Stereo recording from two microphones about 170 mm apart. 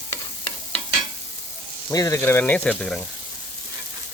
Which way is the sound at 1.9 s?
20° left (ahead or behind).